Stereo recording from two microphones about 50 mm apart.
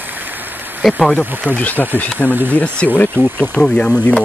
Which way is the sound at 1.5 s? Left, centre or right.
Left.